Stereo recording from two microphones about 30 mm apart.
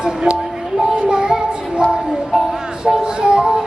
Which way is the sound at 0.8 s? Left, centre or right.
Right.